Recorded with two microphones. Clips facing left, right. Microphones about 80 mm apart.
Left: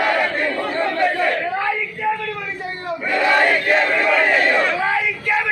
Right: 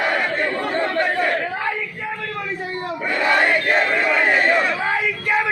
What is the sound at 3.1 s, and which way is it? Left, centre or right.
Battle cry, right.